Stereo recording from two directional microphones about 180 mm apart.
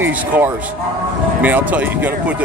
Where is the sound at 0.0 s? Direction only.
10° right (ahead or behind).